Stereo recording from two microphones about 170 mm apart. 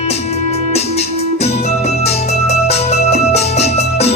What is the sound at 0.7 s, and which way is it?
Music, 40° left (ahead or behind).